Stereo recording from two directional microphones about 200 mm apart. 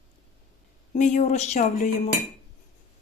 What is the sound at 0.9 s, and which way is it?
Speech, 35° left (ahead or behind).